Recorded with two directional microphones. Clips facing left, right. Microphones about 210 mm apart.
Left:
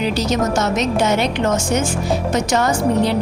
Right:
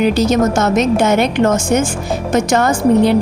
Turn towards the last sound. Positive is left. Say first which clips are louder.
# right 5 dB
turn(degrees=-55)  # may be behind; listen again after turning